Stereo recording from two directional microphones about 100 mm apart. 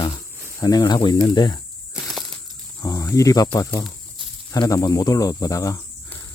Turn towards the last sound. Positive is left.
turn(degrees=35)  # may be behind; listen again after turning